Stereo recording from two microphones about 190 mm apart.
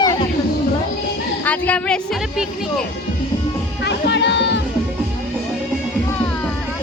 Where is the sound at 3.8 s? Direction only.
65° left (ahead or behind).